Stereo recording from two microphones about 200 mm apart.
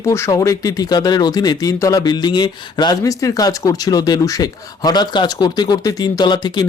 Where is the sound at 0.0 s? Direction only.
15° left (ahead or behind).